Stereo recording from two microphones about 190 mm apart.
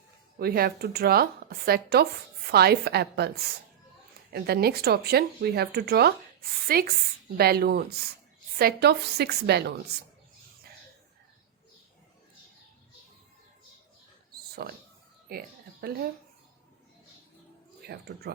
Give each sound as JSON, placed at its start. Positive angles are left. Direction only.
{"t": 0.3, "sound": "speech", "side_deg": -55}
{"t": 14.6, "sound": "speech", "side_deg": -55}
{"t": 15.3, "sound": "a sound", "side_deg": -55}
{"t": 17.8, "sound": "speech", "side_deg": -55}